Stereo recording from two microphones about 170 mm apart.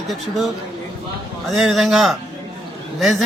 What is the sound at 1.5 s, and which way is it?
Speech, centre (ahead or behind).